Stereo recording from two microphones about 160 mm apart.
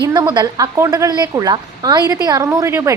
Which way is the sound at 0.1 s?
20° right (ahead or behind).